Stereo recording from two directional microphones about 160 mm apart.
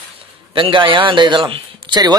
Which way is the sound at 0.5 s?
30° right (ahead or behind).